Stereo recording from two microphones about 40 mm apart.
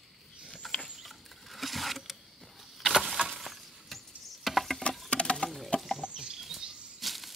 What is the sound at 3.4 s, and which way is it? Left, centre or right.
Rodents, centre.